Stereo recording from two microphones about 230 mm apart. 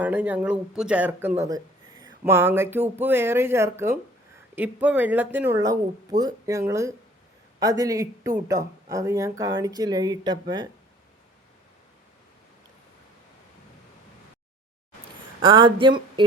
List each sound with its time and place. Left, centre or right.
0.0 s speech: centre
15.4 s speech: right